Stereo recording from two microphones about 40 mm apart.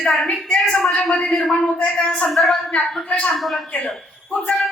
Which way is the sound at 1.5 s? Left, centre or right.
Centre.